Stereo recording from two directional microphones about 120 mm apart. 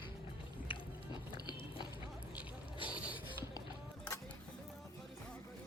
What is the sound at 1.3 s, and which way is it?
Biting, 40° left (ahead or behind).